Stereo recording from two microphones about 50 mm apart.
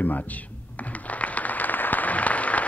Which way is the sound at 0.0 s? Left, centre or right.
Left.